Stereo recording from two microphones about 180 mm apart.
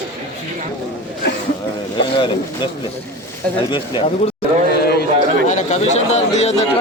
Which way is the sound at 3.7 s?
30° left (ahead or behind).